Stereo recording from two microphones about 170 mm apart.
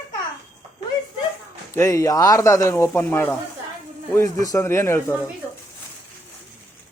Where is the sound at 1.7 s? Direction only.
15° left (ahead or behind).